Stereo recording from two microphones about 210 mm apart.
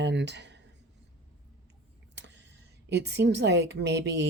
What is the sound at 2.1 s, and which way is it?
A woman's voice, 55° right (ahead or behind).